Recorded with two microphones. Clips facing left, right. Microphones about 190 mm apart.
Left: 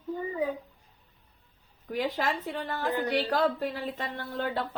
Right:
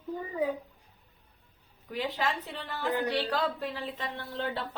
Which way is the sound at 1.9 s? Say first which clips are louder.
Left 2 dB; 50° left (ahead or behind).